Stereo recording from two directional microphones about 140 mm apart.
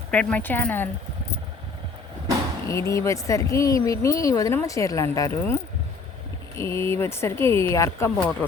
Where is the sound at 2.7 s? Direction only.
20° left (ahead or behind).